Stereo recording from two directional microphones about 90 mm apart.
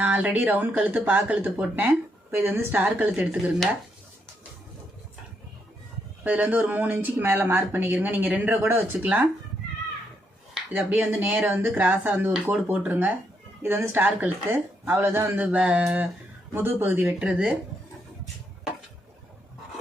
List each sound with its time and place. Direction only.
0.0 s speech: 15° right (ahead or behind)
6.2 s speech: 15° right (ahead or behind)
10.7 s speech: 20° right (ahead or behind)
15.5 s speech: 10° right (ahead or behind)
16.6 s speech: 20° right (ahead or behind)